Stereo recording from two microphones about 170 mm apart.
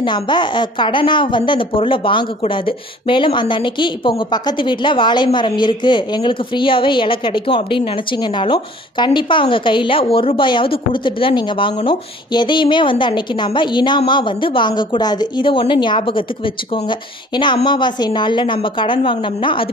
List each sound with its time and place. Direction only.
0.0 s speech: 25° left (ahead or behind)